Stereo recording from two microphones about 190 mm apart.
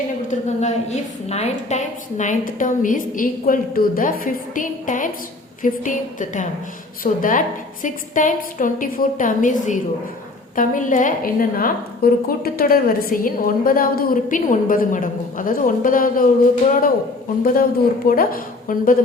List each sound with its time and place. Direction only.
0.3 s a woman's voice: 40° left (ahead or behind)